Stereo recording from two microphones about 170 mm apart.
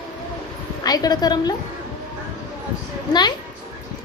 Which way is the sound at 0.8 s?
20° left (ahead or behind).